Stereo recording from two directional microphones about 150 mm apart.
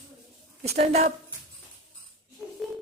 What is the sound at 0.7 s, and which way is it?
Speech, 45° right (ahead or behind).